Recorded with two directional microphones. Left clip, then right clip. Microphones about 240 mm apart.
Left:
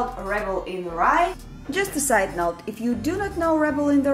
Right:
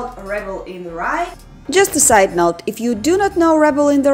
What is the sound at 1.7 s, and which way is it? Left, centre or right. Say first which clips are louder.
A woman's voice: right 10 dB; right.